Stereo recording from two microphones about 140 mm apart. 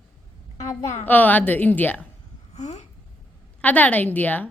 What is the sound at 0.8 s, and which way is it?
Speech, 55° left (ahead or behind).